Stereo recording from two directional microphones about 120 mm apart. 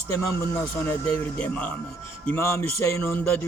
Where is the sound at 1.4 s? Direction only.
10° left (ahead or behind).